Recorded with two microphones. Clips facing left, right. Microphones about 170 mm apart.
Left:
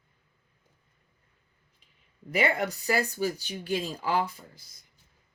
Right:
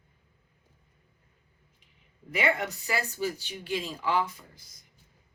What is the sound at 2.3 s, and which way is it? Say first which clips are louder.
Speech: left 2 dB; 35° left (ahead or behind).